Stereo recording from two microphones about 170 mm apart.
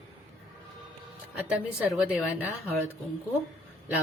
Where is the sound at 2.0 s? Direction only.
10° right (ahead or behind).